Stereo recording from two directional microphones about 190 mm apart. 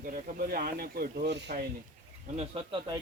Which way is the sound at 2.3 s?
30° right (ahead or behind).